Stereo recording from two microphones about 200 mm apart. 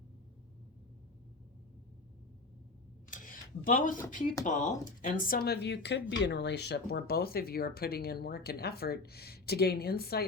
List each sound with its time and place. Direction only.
3.1 s speech: 40° left (ahead or behind)